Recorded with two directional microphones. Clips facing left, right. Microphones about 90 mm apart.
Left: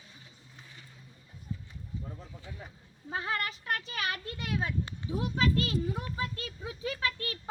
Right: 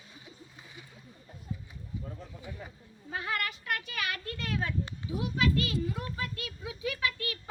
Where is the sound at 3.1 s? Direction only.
30° left (ahead or behind).